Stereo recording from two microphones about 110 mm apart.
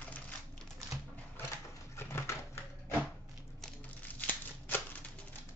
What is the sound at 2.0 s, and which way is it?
Typewriter, 25° left (ahead or behind).